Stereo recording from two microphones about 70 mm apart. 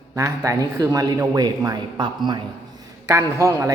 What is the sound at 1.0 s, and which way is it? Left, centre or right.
Speech, right.